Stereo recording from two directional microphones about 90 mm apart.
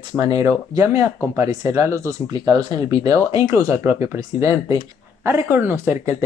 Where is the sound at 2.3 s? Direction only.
50° right (ahead or behind); by 6.1 s 30° right (ahead or behind).